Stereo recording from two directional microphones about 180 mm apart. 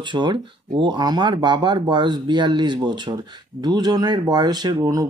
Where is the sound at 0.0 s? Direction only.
25° right (ahead or behind).